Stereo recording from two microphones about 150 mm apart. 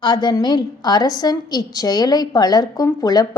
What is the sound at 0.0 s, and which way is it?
A woman's voice, 30° left (ahead or behind).